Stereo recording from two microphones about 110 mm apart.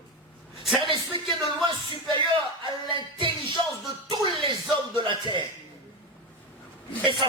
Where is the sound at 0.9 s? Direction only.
50° right (ahead or behind).